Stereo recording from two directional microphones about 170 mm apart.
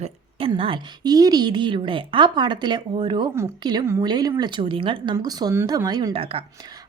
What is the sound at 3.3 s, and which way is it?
A woman's voice, 15° right (ahead or behind).